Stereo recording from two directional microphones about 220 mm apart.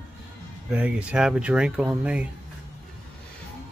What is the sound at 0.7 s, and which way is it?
Speech, 5° right (ahead or behind).